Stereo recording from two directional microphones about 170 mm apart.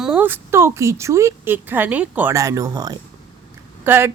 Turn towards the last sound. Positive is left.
turn(degrees=-15)  # may be behind; listen again after turning